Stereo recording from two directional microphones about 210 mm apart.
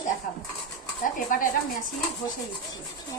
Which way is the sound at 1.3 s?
40° left (ahead or behind).